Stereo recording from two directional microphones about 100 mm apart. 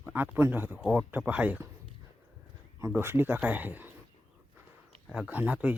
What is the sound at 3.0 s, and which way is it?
Speech, 25° right (ahead or behind).